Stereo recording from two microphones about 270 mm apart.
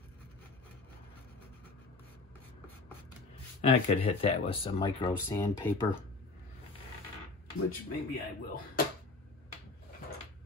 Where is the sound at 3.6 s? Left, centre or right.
Left.